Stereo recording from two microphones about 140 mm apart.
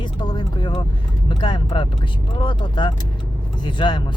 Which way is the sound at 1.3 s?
35° left (ahead or behind).